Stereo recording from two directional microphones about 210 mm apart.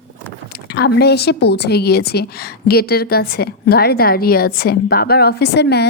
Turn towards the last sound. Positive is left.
turn(degrees=50)  # may be behind; listen again after turning